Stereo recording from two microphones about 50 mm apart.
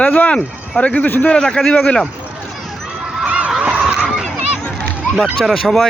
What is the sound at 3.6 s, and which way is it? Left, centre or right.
Fowl, centre.